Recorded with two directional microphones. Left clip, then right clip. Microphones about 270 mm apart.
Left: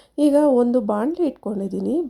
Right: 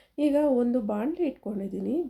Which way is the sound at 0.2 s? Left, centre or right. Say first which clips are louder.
Left 8 dB; left.